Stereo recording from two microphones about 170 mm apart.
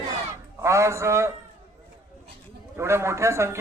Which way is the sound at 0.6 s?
15° right (ahead or behind).